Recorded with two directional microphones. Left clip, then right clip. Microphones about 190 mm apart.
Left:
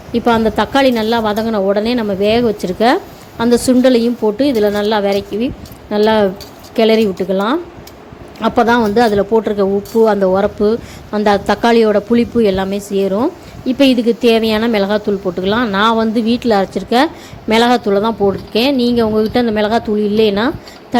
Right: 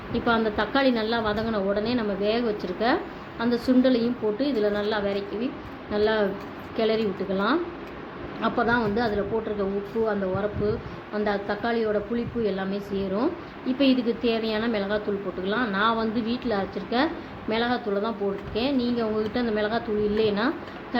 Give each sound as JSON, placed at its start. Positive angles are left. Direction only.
{"t": 0.1, "sound": "a woman's voice", "side_deg": 45}